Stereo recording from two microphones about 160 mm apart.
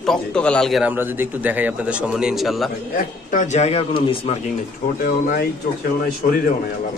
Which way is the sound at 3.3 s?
50° left (ahead or behind).